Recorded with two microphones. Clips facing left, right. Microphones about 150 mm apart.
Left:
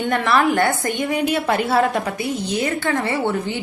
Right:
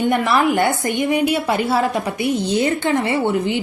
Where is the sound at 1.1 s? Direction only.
5° right (ahead or behind).